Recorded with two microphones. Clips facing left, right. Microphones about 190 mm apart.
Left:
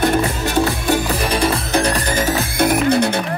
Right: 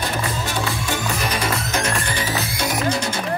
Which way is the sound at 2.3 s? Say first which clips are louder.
Left 7 dB; 55° left (ahead or behind).